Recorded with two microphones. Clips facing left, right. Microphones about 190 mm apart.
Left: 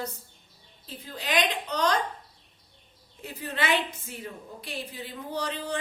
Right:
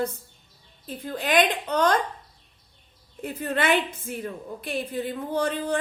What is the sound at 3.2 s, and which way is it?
A woman's voice, 55° right (ahead or behind).